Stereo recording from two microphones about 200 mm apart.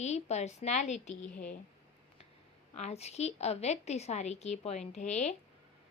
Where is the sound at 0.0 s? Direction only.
35° left (ahead or behind).